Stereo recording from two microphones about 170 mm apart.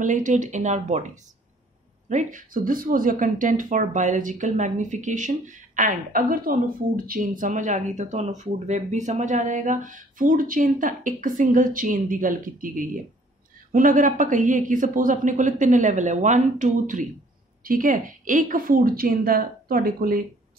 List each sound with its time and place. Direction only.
0.0 s a woman's voice: 50° right (ahead or behind)